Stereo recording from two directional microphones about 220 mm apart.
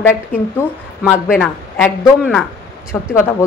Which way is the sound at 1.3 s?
Centre (ahead or behind).